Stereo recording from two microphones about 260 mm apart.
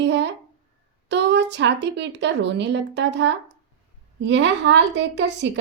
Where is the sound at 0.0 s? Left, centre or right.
Right.